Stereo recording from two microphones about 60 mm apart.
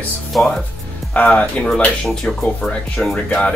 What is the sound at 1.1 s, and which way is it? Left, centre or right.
Speech, left.